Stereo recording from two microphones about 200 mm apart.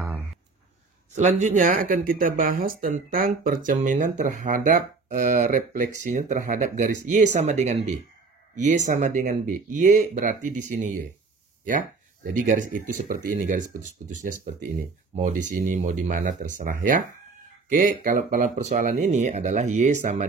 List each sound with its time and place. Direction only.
1.1 s speech: 35° right (ahead or behind)
12.4 s speech: 40° right (ahead or behind)